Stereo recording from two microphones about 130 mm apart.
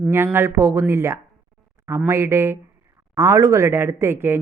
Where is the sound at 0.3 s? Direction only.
20° right (ahead or behind).